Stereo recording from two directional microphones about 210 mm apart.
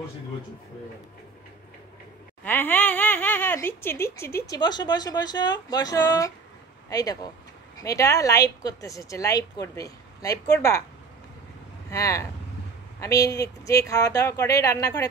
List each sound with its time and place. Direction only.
2.4 s speech: 10° left (ahead or behind)
11.9 s speech: 15° left (ahead or behind)